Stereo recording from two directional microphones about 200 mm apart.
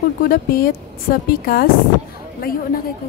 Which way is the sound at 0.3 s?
45° left (ahead or behind).